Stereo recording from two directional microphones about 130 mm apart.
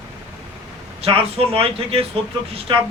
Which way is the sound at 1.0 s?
45° right (ahead or behind).